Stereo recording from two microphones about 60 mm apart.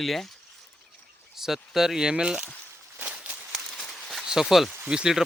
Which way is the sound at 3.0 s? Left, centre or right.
Right.